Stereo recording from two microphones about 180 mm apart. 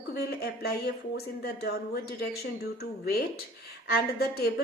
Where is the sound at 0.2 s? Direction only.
60° left (ahead or behind).